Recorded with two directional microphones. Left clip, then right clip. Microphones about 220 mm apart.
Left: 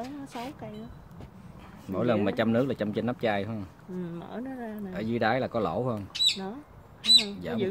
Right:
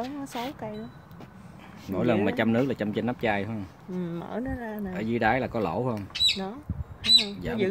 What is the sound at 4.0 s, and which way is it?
Speech, 40° right (ahead or behind).